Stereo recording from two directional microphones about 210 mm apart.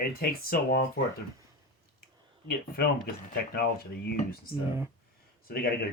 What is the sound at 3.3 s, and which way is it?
Speech, 50° left (ahead or behind).